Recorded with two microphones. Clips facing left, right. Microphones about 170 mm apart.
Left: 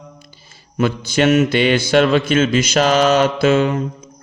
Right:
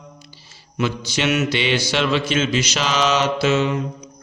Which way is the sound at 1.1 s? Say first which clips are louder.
Left 8 dB; 50° left (ahead or behind).